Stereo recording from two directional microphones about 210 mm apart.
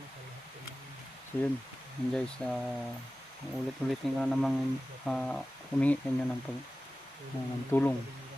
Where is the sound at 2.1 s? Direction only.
5° left (ahead or behind).